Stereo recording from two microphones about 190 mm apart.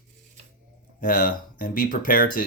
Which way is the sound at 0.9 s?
45° left (ahead or behind).